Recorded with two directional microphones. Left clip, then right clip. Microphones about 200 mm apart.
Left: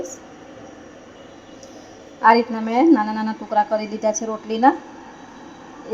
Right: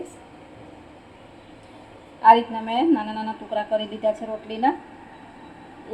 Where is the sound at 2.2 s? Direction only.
30° left (ahead or behind).